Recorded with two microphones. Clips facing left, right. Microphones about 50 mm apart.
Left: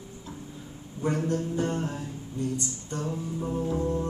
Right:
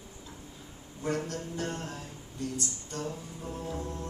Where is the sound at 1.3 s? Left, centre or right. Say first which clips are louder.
Left 8 dB; centre.